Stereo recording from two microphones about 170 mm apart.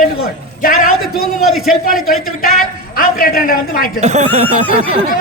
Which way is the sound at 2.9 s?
60° left (ahead or behind).